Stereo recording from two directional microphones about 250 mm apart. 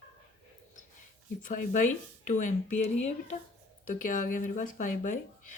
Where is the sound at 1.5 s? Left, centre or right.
Left.